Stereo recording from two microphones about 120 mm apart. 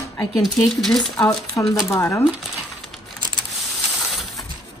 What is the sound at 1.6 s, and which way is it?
Speech, 15° left (ahead or behind).